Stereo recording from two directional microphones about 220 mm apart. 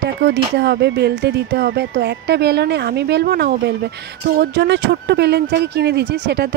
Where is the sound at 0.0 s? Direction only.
50° right (ahead or behind).